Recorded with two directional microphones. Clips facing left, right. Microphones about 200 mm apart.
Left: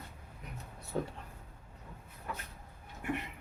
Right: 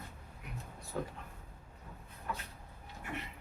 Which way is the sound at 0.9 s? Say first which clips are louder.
Left 3 dB; 25° left (ahead or behind).